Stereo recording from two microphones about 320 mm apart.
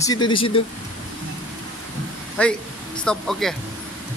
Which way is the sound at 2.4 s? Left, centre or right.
Centre.